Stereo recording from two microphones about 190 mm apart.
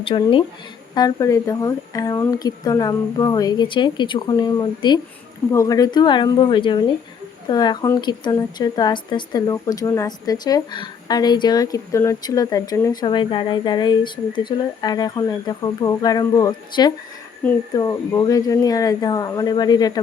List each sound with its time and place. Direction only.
0.0 s a woman's voice: 25° left (ahead or behind)